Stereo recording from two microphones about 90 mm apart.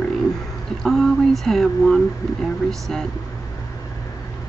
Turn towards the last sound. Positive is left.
turn(degrees=5)  # may be behind; listen again after turning